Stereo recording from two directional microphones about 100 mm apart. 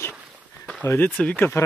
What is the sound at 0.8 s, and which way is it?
Speech, 20° left (ahead or behind).